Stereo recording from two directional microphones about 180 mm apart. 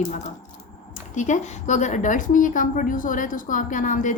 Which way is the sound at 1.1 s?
40° left (ahead or behind).